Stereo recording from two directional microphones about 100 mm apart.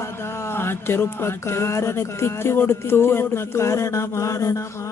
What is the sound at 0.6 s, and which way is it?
Speech, 25° left (ahead or behind).